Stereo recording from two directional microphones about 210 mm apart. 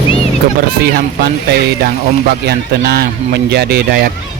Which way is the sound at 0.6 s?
45° right (ahead or behind).